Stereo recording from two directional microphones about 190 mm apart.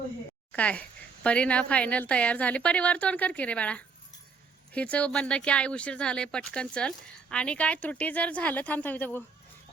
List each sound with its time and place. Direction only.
0.5 s speech: 5° left (ahead or behind)